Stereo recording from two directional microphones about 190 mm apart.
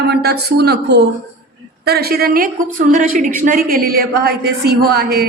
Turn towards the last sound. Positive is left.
turn(degrees=-55)  # may be behind; listen again after turning